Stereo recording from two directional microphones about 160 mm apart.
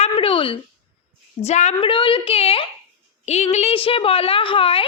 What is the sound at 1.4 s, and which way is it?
Speech, 45° left (ahead or behind).